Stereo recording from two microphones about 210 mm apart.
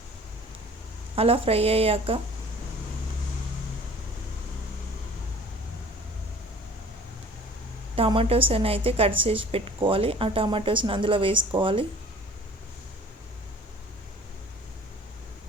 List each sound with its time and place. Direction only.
1.1 s a woman's voice: 25° right (ahead or behind)
7.9 s a woman's voice: 25° right (ahead or behind)